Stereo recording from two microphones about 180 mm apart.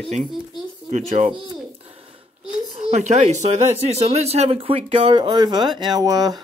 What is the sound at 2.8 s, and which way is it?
Speech, 40° right (ahead or behind).